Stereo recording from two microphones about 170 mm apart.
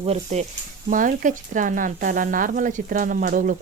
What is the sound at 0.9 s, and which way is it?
Speech, 50° right (ahead or behind).